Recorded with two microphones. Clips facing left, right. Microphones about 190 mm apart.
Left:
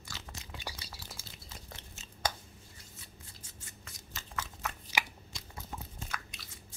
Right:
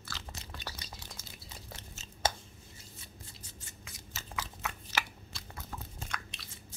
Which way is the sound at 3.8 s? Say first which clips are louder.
Right 2 dB; 5° right (ahead or behind).